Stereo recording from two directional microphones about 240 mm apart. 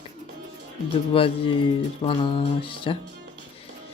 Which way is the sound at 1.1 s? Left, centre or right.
Left.